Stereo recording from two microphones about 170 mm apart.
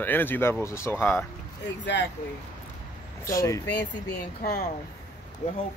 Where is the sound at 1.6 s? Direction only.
90° left.